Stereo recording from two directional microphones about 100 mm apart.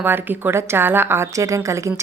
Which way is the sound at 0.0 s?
20° right (ahead or behind).